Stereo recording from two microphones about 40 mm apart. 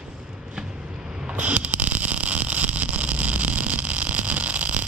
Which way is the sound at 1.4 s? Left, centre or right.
Right.